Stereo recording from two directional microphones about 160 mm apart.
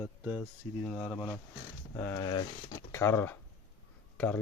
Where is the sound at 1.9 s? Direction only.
20° left (ahead or behind).